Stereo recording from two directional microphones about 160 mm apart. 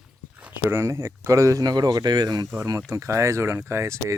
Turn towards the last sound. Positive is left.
turn(degrees=-15)  # may be behind; listen again after turning